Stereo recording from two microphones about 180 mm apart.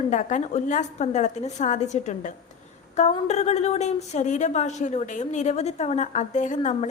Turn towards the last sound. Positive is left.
turn(degrees=40)  # may be behind; listen again after turning